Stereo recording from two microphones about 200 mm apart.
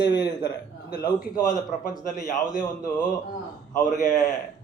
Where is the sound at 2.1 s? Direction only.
40° left (ahead or behind).